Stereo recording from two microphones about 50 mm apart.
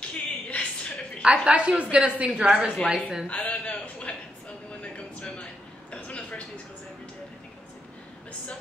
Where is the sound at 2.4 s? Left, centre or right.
Centre.